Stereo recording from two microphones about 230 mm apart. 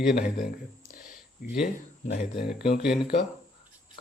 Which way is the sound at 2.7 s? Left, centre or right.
Left.